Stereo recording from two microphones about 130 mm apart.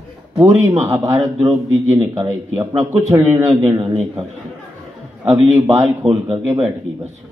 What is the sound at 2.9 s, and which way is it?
A man's voice, 20° right (ahead or behind).